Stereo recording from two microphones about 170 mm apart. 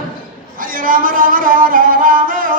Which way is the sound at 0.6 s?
55° right (ahead or behind).